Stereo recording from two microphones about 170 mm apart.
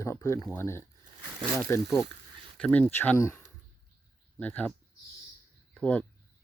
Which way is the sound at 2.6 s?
10° left (ahead or behind).